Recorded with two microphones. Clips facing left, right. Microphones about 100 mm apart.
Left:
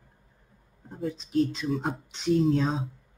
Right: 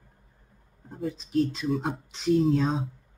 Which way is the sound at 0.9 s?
Centre (ahead or behind).